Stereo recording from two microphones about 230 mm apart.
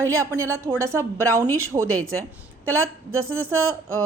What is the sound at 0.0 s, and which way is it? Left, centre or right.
Speech, centre.